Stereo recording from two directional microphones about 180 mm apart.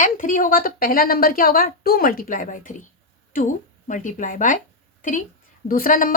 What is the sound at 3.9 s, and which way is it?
A woman's voice, 45° left (ahead or behind).